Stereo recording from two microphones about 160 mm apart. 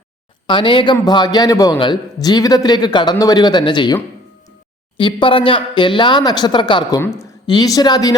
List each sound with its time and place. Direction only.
0.4 s a man's voice: 30° left (ahead or behind)
4.9 s speech: 30° left (ahead or behind)